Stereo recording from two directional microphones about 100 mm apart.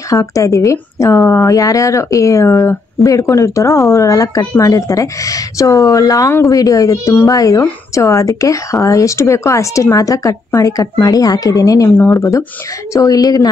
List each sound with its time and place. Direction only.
0.1 s speech: 35° left (ahead or behind)